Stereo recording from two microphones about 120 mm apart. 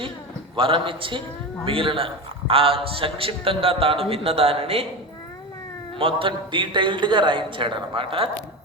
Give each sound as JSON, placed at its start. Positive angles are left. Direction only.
{"t": 0.5, "sound": "a man's voice", "side_deg": -45}
{"t": 6.0, "sound": "a man's voice", "side_deg": -50}